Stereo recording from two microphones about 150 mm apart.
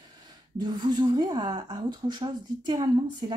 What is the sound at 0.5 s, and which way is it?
Speech, 30° right (ahead or behind).